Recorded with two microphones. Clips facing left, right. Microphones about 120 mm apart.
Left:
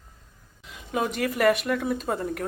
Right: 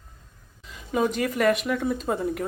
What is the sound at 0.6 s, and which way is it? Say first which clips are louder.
Speech: right 3 dB; centre (ahead or behind).